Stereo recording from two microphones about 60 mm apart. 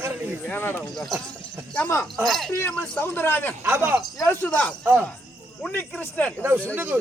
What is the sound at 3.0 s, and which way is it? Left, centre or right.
Speech, left.